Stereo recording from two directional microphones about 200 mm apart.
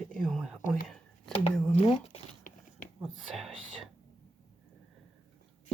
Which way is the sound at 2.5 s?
40° left (ahead or behind).